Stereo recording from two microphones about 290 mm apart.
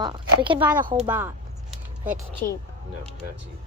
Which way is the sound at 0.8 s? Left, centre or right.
Right.